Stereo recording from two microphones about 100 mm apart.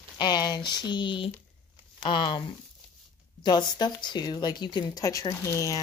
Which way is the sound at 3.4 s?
45° left (ahead or behind).